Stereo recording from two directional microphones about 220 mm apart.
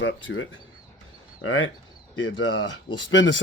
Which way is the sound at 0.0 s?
55° left (ahead or behind).